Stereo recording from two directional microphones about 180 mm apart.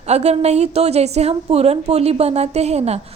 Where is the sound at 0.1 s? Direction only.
35° right (ahead or behind).